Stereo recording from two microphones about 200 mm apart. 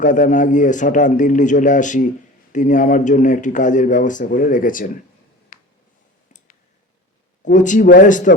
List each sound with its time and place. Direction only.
0.0 s speech: 40° left (ahead or behind)
5.5 s a sound: 45° left (ahead or behind)
7.4 s speech: 40° left (ahead or behind)